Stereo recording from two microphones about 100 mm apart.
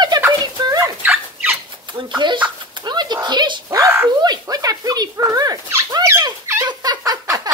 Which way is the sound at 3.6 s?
30° right (ahead or behind).